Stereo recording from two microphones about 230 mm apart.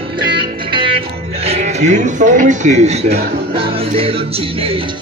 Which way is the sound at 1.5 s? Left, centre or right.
Right.